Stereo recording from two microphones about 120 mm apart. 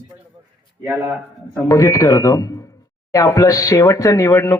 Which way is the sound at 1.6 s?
25° left (ahead or behind).